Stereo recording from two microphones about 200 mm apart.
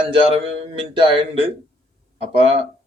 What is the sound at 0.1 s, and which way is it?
Speech, 30° right (ahead or behind).